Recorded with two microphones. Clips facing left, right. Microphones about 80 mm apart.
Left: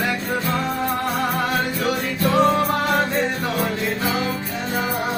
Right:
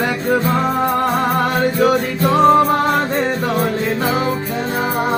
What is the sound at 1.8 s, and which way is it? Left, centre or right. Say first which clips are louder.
Music: right 7 dB; right.